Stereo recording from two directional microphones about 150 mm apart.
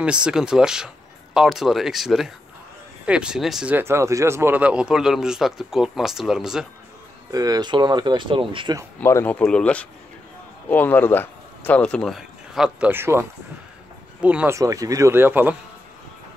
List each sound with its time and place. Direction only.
0.0 s a man's voice: 5° right (ahead or behind)
3.7 s a man's voice: 15° right (ahead or behind)
7.2 s speech: 25° right (ahead or behind)
9.0 s speech: 15° left (ahead or behind); by 12.9 s 5° right (ahead or behind)
12.9 s speech: 15° right (ahead or behind)
14.6 s speech: 20° right (ahead or behind)